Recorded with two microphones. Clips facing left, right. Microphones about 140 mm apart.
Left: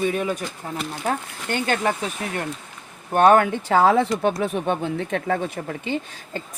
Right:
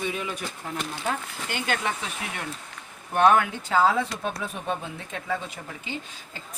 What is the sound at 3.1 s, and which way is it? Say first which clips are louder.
Speech: left 5 dB; 45° left (ahead or behind).